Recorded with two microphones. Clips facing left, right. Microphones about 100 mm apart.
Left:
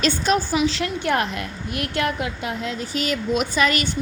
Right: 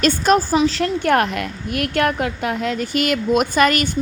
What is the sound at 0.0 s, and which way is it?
A woman's voice, 45° right (ahead or behind).